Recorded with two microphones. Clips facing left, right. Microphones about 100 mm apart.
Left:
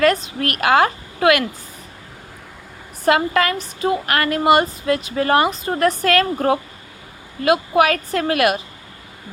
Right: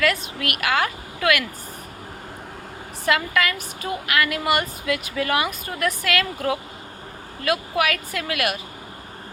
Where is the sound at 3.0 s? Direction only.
30° left (ahead or behind).